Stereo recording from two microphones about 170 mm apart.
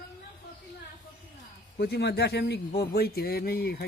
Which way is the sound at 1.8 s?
70° left (ahead or behind).